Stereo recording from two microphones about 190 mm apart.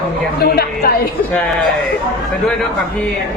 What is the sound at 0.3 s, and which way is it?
Speech, 55° left (ahead or behind).